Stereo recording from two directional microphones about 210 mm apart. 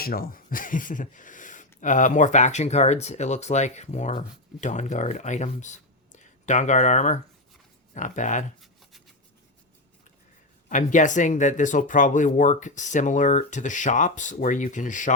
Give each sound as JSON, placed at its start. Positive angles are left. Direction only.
{"t": 0.0, "sound": "speech", "side_deg": 45}
{"t": 8.6, "sound": "a sound", "side_deg": 0}
{"t": 10.7, "sound": "speech", "side_deg": 35}